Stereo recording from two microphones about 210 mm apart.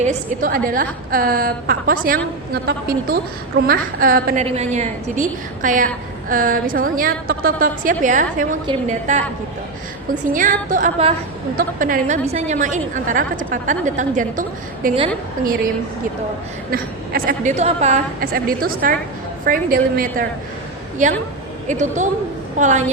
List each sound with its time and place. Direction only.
0.0 s a woman's voice: 35° right (ahead or behind)
4.4 s a woman's voice: 30° right (ahead or behind)
10.3 s a woman's voice: 40° right (ahead or behind)
16.7 s a woman's voice: 45° right (ahead or behind)